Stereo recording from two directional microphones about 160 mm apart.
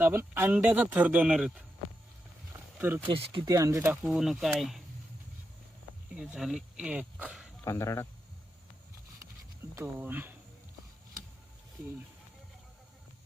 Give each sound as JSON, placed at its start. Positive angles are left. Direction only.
{"t": 0.0, "sound": "speech", "side_deg": -15}
{"t": 2.5, "sound": "wild animals", "side_deg": -15}
{"t": 3.3, "sound": "speech", "side_deg": -20}
{"t": 4.1, "sound": "speech", "side_deg": -5}
{"t": 6.1, "sound": "speech", "side_deg": -5}
{"t": 7.6, "sound": "speech", "side_deg": 20}
{"t": 9.7, "sound": "speech", "side_deg": -10}